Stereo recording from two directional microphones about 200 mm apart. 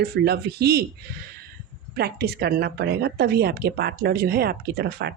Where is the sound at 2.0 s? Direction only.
50° right (ahead or behind).